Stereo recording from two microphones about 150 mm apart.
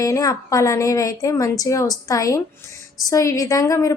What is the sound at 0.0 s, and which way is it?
A woman's voice, 25° left (ahead or behind).